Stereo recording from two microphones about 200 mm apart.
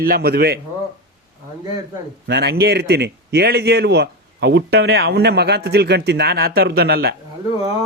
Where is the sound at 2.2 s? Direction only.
55° right (ahead or behind).